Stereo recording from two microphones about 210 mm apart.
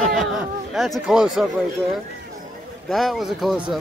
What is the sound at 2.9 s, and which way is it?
Speech, centre (ahead or behind).